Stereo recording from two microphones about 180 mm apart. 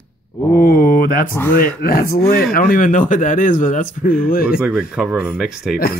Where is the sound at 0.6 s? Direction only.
55° left (ahead or behind).